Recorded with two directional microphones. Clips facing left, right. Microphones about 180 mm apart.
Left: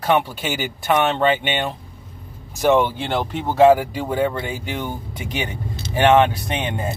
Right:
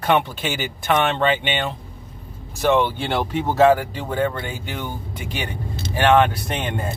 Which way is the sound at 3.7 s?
10° left (ahead or behind).